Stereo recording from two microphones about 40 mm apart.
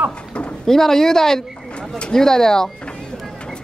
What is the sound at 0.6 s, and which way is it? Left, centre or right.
Speech, centre.